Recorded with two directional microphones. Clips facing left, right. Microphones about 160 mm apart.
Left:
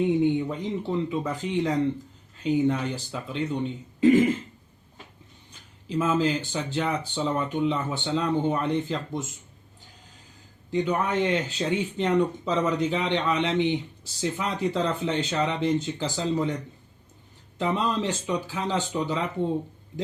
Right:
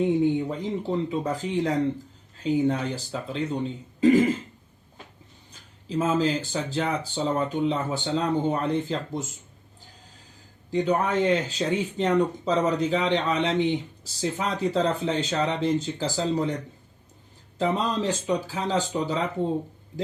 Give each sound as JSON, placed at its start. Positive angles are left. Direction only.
{"t": 0.3, "sound": "speech", "side_deg": -35}
{"t": 5.9, "sound": "speech", "side_deg": -35}
{"t": 10.7, "sound": "speech", "side_deg": -35}
{"t": 17.6, "sound": "speech", "side_deg": -40}